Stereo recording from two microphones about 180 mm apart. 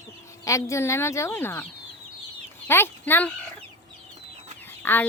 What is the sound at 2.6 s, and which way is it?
Speech, 15° left (ahead or behind).